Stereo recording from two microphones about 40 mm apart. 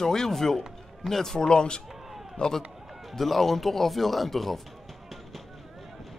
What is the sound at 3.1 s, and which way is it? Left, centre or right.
Speech, centre.